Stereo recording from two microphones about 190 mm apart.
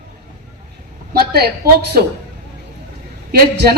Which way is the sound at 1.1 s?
55° right (ahead or behind).